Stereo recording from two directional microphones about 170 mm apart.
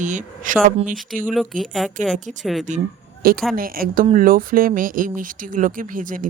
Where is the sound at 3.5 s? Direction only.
60° right (ahead or behind).